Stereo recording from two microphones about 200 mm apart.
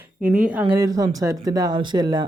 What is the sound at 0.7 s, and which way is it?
A man's voice, 15° right (ahead or behind).